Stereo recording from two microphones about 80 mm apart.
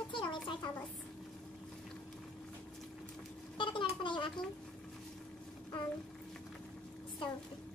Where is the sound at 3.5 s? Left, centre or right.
Left.